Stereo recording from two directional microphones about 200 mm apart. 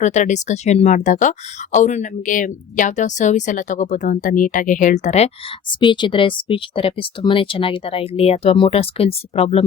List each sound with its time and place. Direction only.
0.0 s speech: 35° left (ahead or behind)
5.8 s speech: 25° left (ahead or behind)